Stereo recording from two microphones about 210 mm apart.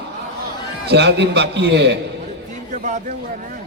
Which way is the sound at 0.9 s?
55° right (ahead or behind).